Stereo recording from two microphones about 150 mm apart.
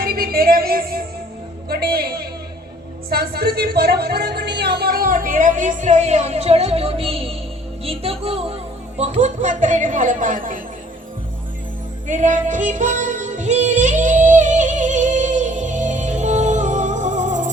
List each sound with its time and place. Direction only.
0.0 s music: 80° right
1.7 s a man's voice: 90° right; by 7.3 s 40° right (ahead or behind)
7.9 s music: 40° right (ahead or behind)
9.0 s speech: 50° right (ahead or behind)
12.0 s music: 55° right (ahead or behind)